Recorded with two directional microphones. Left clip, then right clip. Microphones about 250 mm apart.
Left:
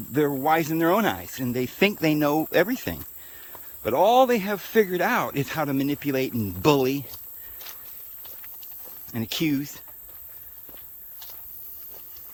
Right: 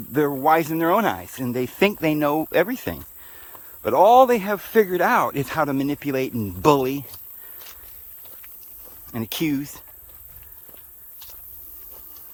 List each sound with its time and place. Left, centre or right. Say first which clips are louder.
0.1 s speech: right 3 dB; centre
9.1 s speech: right 1 dB; centre